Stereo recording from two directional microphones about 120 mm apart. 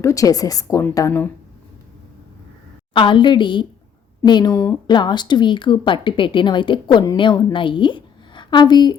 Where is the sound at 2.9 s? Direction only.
45° left (ahead or behind).